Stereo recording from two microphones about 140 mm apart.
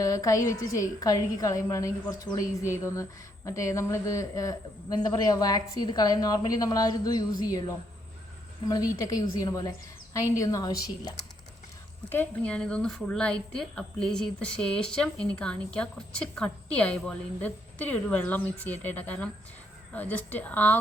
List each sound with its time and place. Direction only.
0.0 s a woman's voice: 25° left (ahead or behind)
12.0 s a woman's voice: 15° left (ahead or behind)